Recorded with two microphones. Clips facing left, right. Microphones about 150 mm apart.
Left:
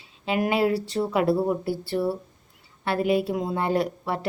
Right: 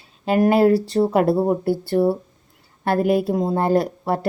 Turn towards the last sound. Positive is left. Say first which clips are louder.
# right 6 dB
turn(degrees=-40)  # may be behind; listen again after turning